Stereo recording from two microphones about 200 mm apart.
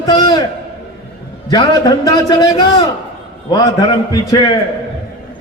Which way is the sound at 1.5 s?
20° left (ahead or behind).